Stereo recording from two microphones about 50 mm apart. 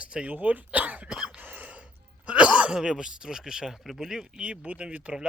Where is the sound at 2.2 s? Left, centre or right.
Right.